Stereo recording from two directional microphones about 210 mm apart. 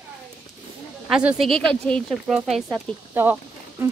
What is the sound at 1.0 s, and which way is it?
Speech, 5° right (ahead or behind).